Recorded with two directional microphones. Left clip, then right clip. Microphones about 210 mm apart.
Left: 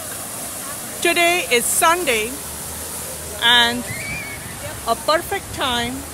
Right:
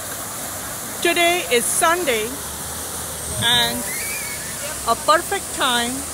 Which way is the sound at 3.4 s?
35° left (ahead or behind).